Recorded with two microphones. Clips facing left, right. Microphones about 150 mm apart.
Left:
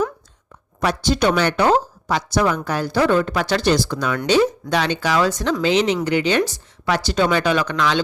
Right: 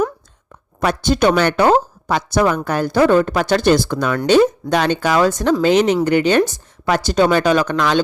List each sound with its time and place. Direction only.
0.8 s speech: 55° right (ahead or behind)